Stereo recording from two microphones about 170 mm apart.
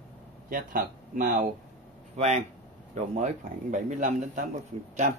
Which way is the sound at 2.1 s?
40° right (ahead or behind).